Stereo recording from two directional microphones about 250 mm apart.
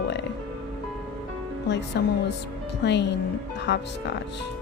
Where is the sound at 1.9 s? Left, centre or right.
Left.